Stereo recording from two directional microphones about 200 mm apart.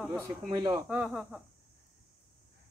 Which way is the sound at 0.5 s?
20° right (ahead or behind).